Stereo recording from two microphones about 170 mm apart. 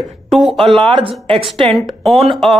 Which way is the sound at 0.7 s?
30° right (ahead or behind).